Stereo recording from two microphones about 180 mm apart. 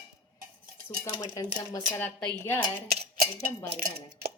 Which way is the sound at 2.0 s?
10° left (ahead or behind).